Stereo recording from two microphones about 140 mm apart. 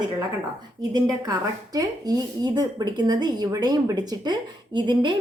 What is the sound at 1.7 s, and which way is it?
Speech, 30° right (ahead or behind).